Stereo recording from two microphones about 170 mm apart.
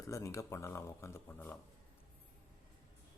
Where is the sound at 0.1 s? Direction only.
20° left (ahead or behind).